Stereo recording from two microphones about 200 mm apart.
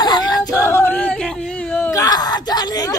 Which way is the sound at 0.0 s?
20° left (ahead or behind).